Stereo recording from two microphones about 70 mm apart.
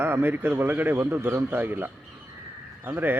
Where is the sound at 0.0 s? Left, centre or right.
Right.